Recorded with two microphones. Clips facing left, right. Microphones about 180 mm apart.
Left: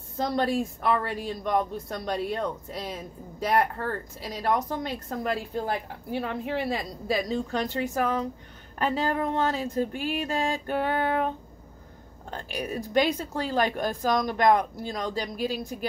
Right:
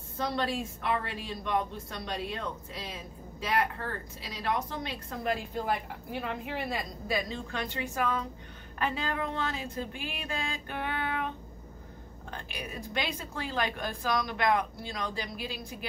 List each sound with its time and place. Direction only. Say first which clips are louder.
0.2 s speech: left 6 dB; 45° left (ahead or behind)
7.1 s speech: left 7 dB; 40° left (ahead or behind)